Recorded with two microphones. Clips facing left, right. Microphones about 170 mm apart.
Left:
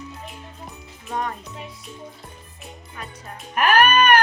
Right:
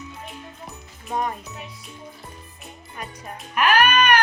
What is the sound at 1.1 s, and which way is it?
Speech, 15° right (ahead or behind).